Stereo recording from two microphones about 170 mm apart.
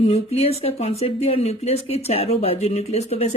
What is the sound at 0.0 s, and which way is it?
Speech, 35° left (ahead or behind).